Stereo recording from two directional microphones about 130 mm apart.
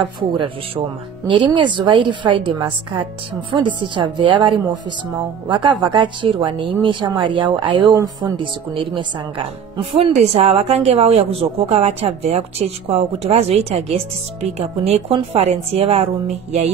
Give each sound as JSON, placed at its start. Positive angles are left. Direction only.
{"t": 0.0, "sound": "speech", "side_deg": -40}
{"t": 8.4, "sound": "a woman's voice", "side_deg": -40}